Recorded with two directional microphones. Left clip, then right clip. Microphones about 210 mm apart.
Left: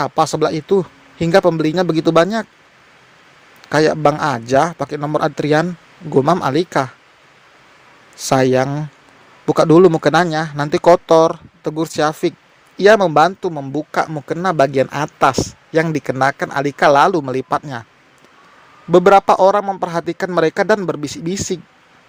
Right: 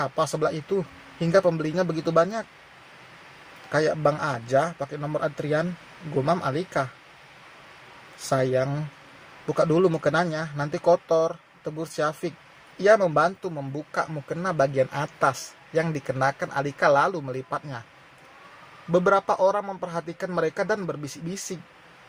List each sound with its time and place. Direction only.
0.0 s speech: 40° left (ahead or behind)
3.7 s speech: 40° left (ahead or behind)
8.3 s speech: 45° left (ahead or behind)
18.9 s speech: 40° left (ahead or behind)